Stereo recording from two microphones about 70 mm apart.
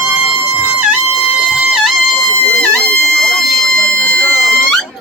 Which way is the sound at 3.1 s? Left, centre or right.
Centre.